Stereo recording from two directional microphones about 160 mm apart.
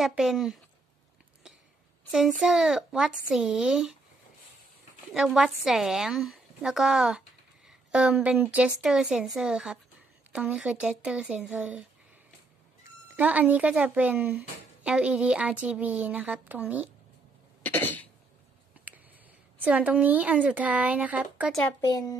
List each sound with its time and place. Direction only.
0.0 s a woman's voice: centre (ahead or behind)
2.1 s a woman's voice: 5° right (ahead or behind)
5.1 s a woman's voice: 5° right (ahead or behind)
12.8 s speech: 10° right (ahead or behind)
17.6 s cough: 10° left (ahead or behind)
19.6 s speech: 10° right (ahead or behind)
21.8 s a child's voice: 25° left (ahead or behind)